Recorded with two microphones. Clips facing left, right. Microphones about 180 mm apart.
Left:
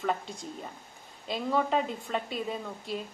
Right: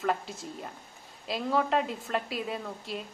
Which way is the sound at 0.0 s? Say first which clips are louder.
Right 1 dB; centre (ahead or behind).